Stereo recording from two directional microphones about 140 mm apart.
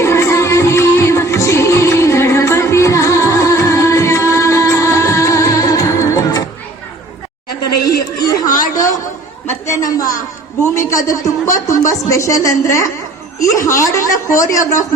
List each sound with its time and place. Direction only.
0.0 s music: 20° left (ahead or behind)
8.2 s chatter: 25° left (ahead or behind)
9.5 s a sound: 20° left (ahead or behind)
13.4 s a woman's voice: 20° left (ahead or behind)